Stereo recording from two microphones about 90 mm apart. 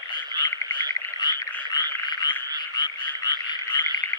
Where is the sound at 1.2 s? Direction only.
50° left (ahead or behind).